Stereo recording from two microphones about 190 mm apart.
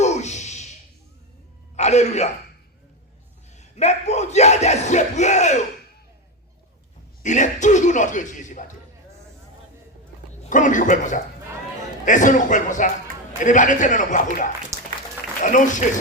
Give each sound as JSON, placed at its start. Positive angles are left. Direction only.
{"t": 0.0, "sound": "a sound", "side_deg": 35}
{"t": 1.7, "sound": "a man's voice", "side_deg": 35}
{"t": 3.5, "sound": "speech", "side_deg": 35}
{"t": 7.2, "sound": "speech", "side_deg": 40}
{"t": 10.5, "sound": "a man's voice", "side_deg": 40}
{"t": 14.7, "sound": "a sound", "side_deg": -15}
{"t": 15.4, "sound": "speech", "side_deg": 40}